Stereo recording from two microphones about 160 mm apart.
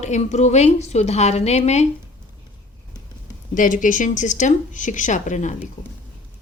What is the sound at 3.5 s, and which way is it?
A woman's voice, 55° left (ahead or behind).